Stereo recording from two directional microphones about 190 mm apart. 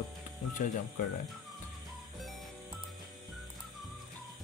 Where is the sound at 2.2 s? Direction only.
Centre (ahead or behind).